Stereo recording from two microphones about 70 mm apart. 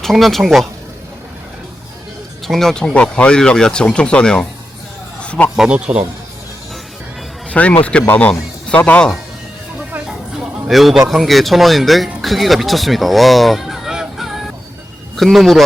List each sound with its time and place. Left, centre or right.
0.0 s speech: centre
2.5 s speech: centre
5.2 s a sound: centre
5.5 s speech: centre
7.5 s speech: centre
10.1 s a sound: centre
11.1 s speech: centre
12.2 s fowl: centre
15.1 s speech: centre